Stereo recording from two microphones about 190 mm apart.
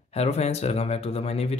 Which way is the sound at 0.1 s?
35° left (ahead or behind).